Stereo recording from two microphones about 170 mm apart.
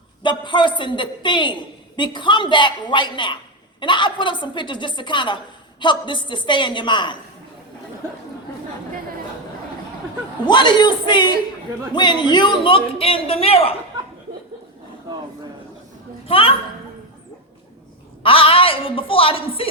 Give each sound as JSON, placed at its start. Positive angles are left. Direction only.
{"t": 0.2, "sound": "a woman's voice", "side_deg": 30}
{"t": 10.4, "sound": "a woman's voice", "side_deg": 25}
{"t": 16.2, "sound": "a woman's voice", "side_deg": 35}
{"t": 18.2, "sound": "a man's voice", "side_deg": 30}